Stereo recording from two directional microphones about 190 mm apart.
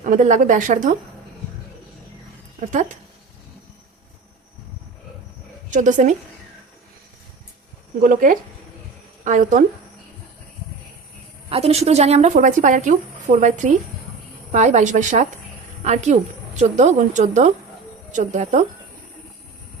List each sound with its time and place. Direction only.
0.0 s a woman's voice: 45° right (ahead or behind)
2.6 s speech: 40° right (ahead or behind)
5.7 s speech: 40° right (ahead or behind)
8.0 s a woman's voice: 45° right (ahead or behind)
11.4 s speech: 30° right (ahead or behind)